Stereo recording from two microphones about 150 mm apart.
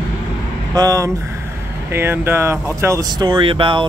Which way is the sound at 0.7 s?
20° right (ahead or behind).